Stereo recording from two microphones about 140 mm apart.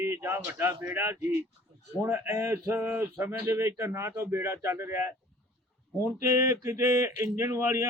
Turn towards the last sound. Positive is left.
turn(degrees=-20)  # may be behind; listen again after turning